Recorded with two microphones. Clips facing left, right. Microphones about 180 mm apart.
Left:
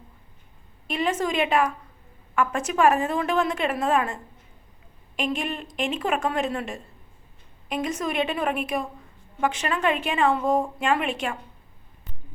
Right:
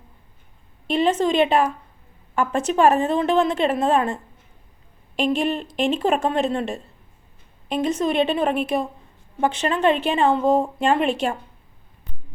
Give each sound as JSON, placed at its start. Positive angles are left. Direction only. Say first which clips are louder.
{"t": 0.9, "sound": "a woman's voice", "louder": "right 6 dB", "side_deg": -30}